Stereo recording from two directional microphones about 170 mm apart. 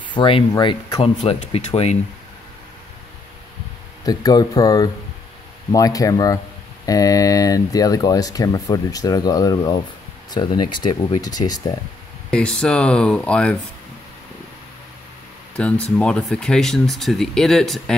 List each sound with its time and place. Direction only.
0.1 s speech: 30° left (ahead or behind)
1.1 s speech: 40° left (ahead or behind)
4.0 s speech: 20° left (ahead or behind)
12.3 s speech: 5° left (ahead or behind)
15.5 s speech: 5° left (ahead or behind)